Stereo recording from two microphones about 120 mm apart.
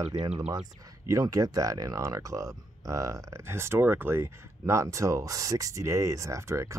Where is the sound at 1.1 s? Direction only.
30° right (ahead or behind).